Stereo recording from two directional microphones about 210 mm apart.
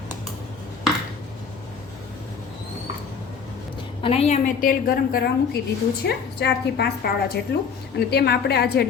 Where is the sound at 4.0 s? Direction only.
25° left (ahead or behind).